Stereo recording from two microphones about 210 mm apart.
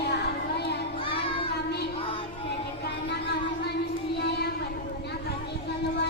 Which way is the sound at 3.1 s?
50° left (ahead or behind).